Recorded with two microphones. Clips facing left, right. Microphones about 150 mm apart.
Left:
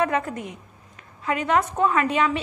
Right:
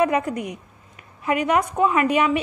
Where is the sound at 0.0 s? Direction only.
15° right (ahead or behind).